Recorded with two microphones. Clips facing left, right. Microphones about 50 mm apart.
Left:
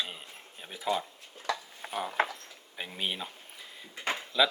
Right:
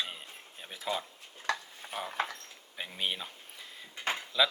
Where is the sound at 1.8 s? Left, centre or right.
Left.